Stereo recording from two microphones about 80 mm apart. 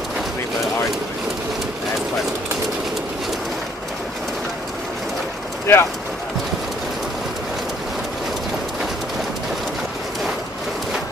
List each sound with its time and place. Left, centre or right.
5.7 s speech: left